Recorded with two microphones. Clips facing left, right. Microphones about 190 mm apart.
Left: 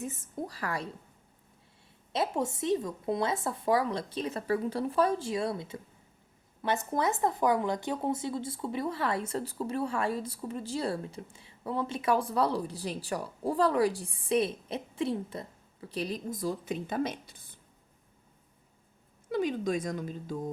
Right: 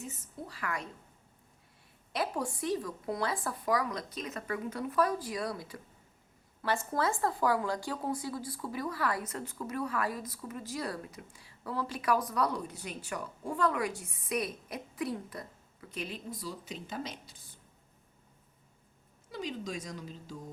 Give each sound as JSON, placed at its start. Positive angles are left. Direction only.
{"t": 0.0, "sound": "a woman's voice", "side_deg": 50}
{"t": 2.1, "sound": "speech", "side_deg": 25}
{"t": 19.3, "sound": "speech", "side_deg": 55}